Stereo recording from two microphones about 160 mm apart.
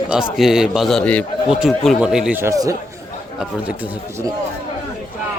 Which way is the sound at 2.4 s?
20° right (ahead or behind).